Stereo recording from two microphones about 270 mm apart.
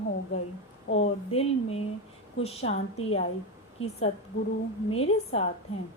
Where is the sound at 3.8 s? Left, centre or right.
Left.